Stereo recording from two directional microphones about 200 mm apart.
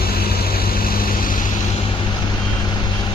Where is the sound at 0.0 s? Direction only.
50° left (ahead or behind).